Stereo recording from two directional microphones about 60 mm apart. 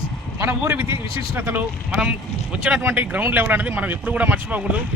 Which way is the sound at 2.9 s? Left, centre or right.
Right.